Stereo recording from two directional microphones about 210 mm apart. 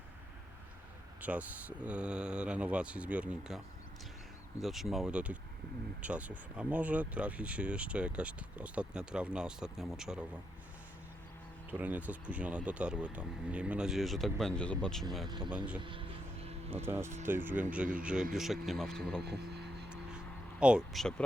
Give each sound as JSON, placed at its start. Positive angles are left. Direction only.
{"t": 1.2, "sound": "speech", "side_deg": -5}
{"t": 4.6, "sound": "speech", "side_deg": 0}
{"t": 11.7, "sound": "speech", "side_deg": -10}
{"t": 15.3, "sound": "speech", "side_deg": -20}
{"t": 15.5, "sound": "speech", "side_deg": -5}
{"t": 15.8, "sound": "vehicle", "side_deg": -25}
{"t": 16.6, "sound": "speech", "side_deg": -10}
{"t": 19.2, "sound": "speech", "side_deg": -50}
{"t": 19.9, "sound": "vehicle", "side_deg": -5}